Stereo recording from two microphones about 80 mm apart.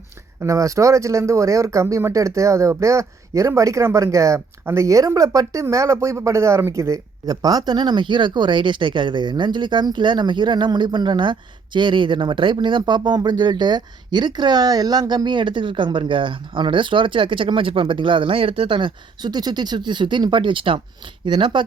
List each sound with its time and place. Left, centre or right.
0.4 s speech: right